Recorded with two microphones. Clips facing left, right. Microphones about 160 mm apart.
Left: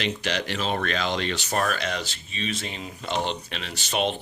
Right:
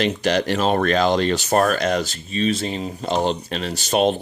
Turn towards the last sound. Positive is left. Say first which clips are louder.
# right 8 dB
turn(degrees=-40)  # may be behind; listen again after turning